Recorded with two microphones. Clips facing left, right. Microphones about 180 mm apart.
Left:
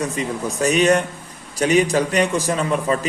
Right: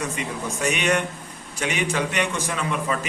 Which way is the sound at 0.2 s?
35° left (ahead or behind).